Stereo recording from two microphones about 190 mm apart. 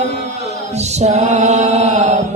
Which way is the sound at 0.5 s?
35° right (ahead or behind).